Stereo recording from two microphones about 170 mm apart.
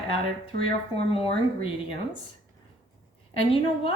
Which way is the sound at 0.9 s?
35° left (ahead or behind).